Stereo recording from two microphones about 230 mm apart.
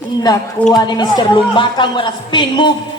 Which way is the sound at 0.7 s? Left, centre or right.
Centre.